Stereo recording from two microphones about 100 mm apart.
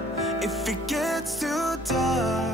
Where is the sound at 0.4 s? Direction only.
Centre (ahead or behind).